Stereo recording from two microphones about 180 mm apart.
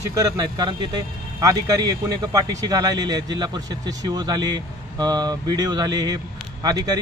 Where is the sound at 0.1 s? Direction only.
20° right (ahead or behind).